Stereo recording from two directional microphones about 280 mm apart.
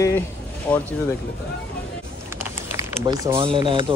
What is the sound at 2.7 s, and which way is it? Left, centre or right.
Speech, centre.